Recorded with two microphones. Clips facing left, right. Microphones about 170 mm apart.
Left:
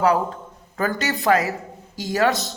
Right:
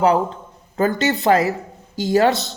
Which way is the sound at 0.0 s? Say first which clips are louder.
Right 3 dB; 25° right (ahead or behind).